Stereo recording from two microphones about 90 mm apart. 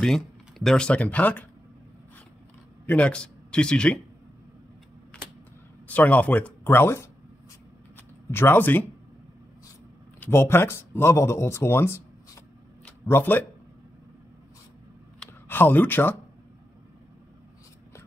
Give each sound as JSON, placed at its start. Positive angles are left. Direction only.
{"t": 0.0, "sound": "speech", "side_deg": 5}
{"t": 2.9, "sound": "speech", "side_deg": 15}
{"t": 5.9, "sound": "a man's voice", "side_deg": 15}
{"t": 6.6, "sound": "speech", "side_deg": 25}
{"t": 8.3, "sound": "speech", "side_deg": 25}
{"t": 10.2, "sound": "speech", "side_deg": 25}
{"t": 13.0, "sound": "speech", "side_deg": 25}
{"t": 15.4, "sound": "speech", "side_deg": 25}